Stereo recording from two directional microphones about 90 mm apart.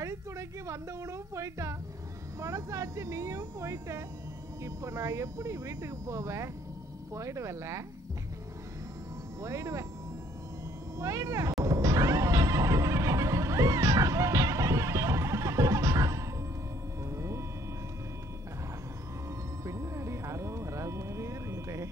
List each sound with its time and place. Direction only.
0.0 s a woman's voice: 35° right (ahead or behind)
9.4 s speech: 35° right (ahead or behind)
11.0 s speech: 35° right (ahead or behind)
11.6 s music: 35° right (ahead or behind)
17.0 s a sound: 35° right (ahead or behind)
19.6 s a sound: 35° right (ahead or behind)